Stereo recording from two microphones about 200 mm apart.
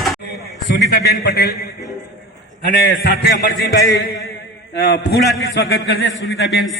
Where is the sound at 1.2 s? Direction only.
50° left (ahead or behind).